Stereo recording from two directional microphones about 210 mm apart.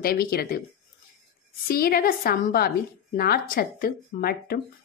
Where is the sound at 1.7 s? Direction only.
45° left (ahead or behind).